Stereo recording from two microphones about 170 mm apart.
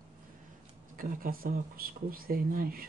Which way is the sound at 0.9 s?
55° right (ahead or behind).